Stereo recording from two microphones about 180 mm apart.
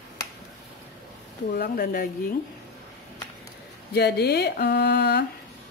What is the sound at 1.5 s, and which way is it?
Speech, 60° left (ahead or behind).